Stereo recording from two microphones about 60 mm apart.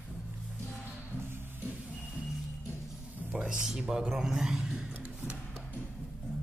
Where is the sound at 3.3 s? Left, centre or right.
Centre.